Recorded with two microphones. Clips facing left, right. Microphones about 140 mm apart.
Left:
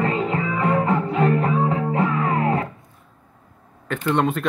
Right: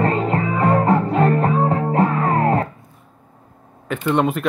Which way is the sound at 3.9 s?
5° right (ahead or behind).